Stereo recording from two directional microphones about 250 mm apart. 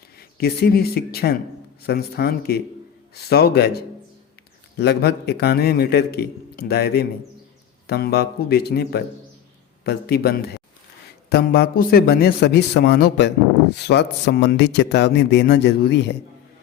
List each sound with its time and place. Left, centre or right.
0.2 s a man's voice: left